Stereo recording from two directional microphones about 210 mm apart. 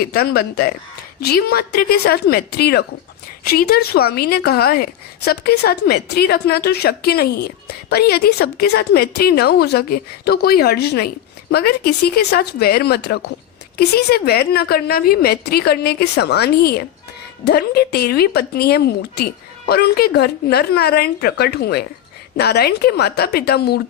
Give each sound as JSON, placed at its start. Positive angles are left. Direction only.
{"t": 0.0, "sound": "a woman's voice", "side_deg": 45}